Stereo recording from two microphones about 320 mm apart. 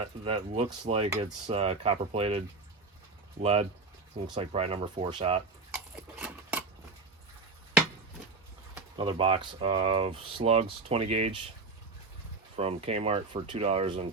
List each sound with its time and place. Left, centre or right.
0.0 s speech: centre
3.4 s speech: centre
6.1 s sewing machine: centre
8.7 s speech: centre
12.5 s speech: centre